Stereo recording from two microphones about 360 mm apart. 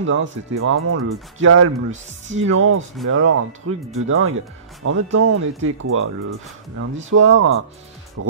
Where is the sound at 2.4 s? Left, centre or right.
Right.